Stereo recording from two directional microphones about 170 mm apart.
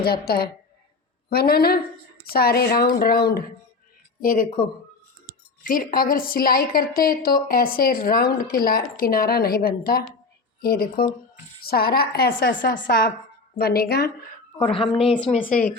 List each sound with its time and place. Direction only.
0.0 s a woman's voice: 65° left (ahead or behind)
4.2 s a woman's voice: 55° left (ahead or behind)
14.6 s speech: 35° left (ahead or behind)
15.4 s a woman's voice: 55° left (ahead or behind)